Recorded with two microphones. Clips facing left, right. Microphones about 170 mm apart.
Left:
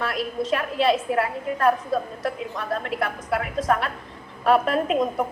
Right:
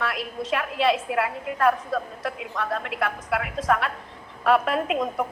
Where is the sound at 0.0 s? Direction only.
40° left (ahead or behind).